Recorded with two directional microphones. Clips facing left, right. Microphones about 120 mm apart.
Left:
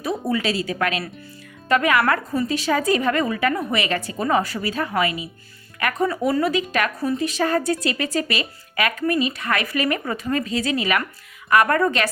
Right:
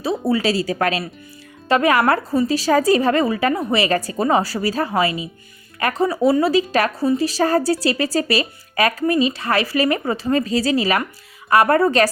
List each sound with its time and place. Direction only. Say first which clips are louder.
0.0 s speech: right 4 dB; 30° right (ahead or behind)